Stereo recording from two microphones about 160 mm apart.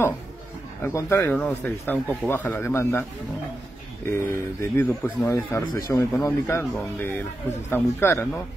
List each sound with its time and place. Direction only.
0.8 s speech: 15° left (ahead or behind)
4.1 s speech: 15° left (ahead or behind)